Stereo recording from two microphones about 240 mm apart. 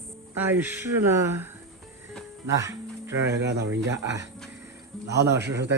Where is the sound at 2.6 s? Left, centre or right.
Centre.